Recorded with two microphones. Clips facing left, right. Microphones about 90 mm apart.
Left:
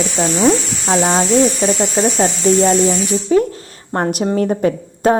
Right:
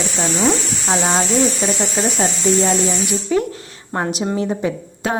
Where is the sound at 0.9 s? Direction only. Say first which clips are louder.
Left 4 dB; 10° left (ahead or behind).